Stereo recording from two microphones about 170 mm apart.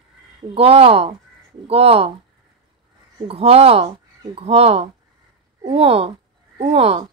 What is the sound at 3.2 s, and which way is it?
Speech, 35° right (ahead or behind).